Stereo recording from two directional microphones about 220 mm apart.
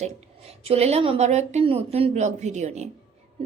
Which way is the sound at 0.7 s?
30° right (ahead or behind).